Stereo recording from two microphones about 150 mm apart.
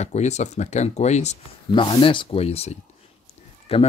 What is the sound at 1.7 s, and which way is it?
Speech, 35° left (ahead or behind).